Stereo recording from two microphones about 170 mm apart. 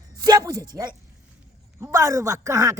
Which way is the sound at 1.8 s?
20° right (ahead or behind).